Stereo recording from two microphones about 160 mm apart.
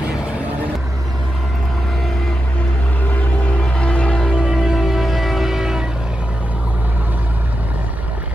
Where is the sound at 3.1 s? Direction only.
10° left (ahead or behind).